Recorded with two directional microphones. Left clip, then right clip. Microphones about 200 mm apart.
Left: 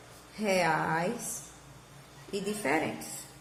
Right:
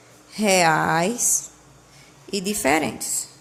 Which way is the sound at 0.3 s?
50° right (ahead or behind).